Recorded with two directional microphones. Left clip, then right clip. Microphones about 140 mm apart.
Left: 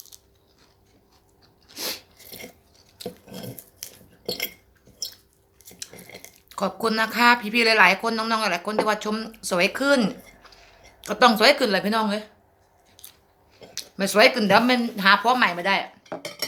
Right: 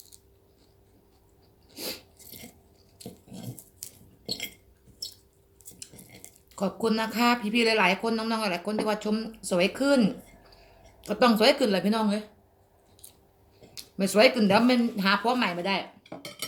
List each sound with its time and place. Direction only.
1.6 s biting: 25° right (ahead or behind)
3.8 s cutlery: 10° left (ahead or behind)
6.5 s speech: 20° right (ahead or behind)
13.7 s speech: 25° right (ahead or behind)